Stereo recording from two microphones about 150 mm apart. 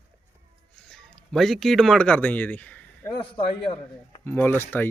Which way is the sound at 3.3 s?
30° left (ahead or behind).